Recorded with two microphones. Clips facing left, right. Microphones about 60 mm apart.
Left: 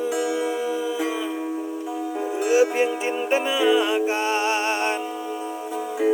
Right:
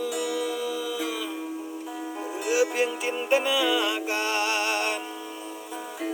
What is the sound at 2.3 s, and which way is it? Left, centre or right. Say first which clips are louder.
Music: left 5 dB; left.